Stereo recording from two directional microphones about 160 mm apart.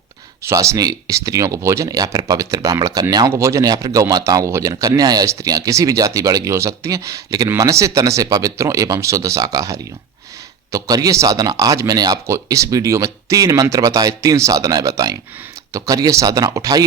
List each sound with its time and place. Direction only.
0.4 s speech: 20° right (ahead or behind)